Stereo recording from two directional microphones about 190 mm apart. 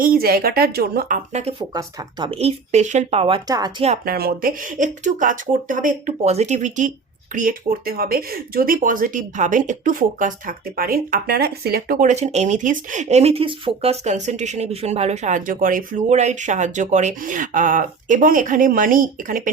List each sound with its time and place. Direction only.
0.0 s speech: 50° right (ahead or behind); by 1.6 s 35° right (ahead or behind)
1.7 s speech: 25° right (ahead or behind)
4.0 s speech: 55° right (ahead or behind)